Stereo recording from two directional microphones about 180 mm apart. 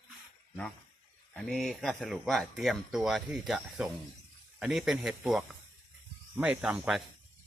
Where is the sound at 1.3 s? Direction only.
Centre (ahead or behind).